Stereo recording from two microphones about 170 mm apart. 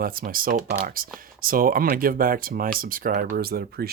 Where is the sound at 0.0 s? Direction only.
60° right (ahead or behind).